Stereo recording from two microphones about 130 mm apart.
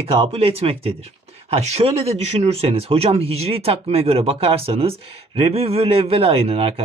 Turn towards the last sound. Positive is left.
turn(degrees=-50)  # may be behind; listen again after turning